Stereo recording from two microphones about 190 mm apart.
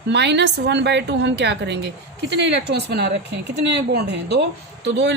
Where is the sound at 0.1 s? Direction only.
65° right (ahead or behind).